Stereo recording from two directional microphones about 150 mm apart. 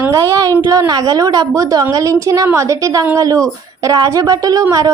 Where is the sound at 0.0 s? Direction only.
20° right (ahead or behind).